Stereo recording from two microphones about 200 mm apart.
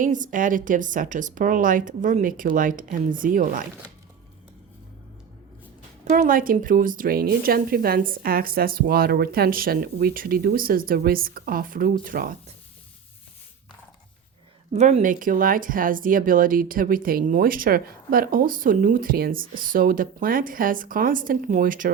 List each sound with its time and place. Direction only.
0.0 s speech: 40° right (ahead or behind)
6.1 s speech: 40° right (ahead or behind)
14.7 s speech: 35° right (ahead or behind)